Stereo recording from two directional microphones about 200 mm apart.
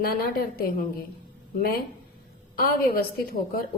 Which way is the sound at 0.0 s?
50° left (ahead or behind).